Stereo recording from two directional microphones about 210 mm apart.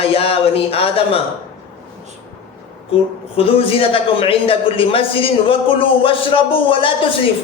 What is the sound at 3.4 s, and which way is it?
A man's voice, 25° left (ahead or behind).